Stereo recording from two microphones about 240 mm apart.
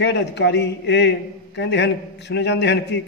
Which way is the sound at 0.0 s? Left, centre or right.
Left.